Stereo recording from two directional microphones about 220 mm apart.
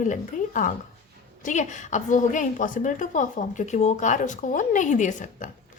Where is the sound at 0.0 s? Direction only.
35° left (ahead or behind).